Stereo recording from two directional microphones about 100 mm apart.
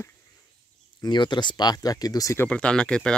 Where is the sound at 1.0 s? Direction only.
50° left (ahead or behind).